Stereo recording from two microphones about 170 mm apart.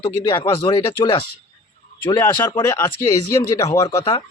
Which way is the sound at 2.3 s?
25° left (ahead or behind).